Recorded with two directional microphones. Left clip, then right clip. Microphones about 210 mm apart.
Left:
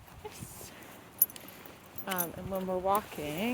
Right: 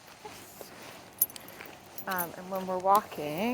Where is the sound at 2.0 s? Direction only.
15° left (ahead or behind).